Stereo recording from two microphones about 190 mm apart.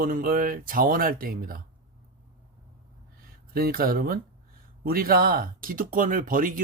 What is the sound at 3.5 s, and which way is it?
A man's voice, 50° right (ahead or behind).